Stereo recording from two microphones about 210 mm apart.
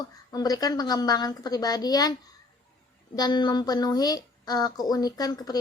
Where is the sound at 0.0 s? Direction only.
15° left (ahead or behind).